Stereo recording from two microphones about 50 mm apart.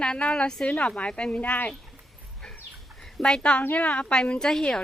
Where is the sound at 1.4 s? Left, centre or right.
Left.